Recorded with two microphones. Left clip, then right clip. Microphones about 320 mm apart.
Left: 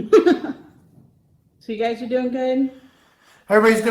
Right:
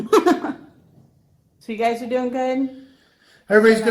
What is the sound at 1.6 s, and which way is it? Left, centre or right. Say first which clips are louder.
Speech: right 2 dB; centre.